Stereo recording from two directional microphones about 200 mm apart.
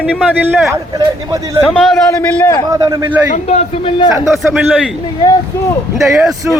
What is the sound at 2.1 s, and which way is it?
Speech, 10° left (ahead or behind).